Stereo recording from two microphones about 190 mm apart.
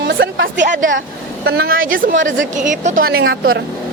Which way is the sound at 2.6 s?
40° right (ahead or behind).